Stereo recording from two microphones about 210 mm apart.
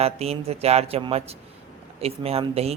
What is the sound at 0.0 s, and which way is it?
Speech, 30° right (ahead or behind).